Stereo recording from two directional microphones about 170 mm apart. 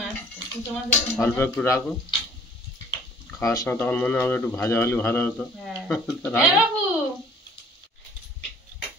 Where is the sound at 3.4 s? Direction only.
20° left (ahead or behind).